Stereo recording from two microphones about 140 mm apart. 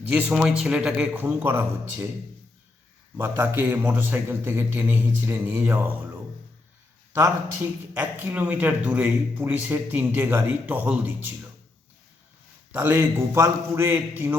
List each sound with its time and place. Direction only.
0.1 s speech: 10° right (ahead or behind)
3.2 s speech: 15° right (ahead or behind)
7.1 s speech: 20° right (ahead or behind)
12.7 s a man's voice: 20° right (ahead or behind)